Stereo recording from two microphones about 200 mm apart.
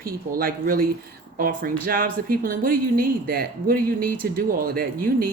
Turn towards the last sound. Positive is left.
turn(degrees=-45)  # may be behind; listen again after turning